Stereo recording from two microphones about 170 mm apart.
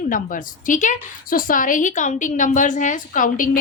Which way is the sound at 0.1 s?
50° left (ahead or behind).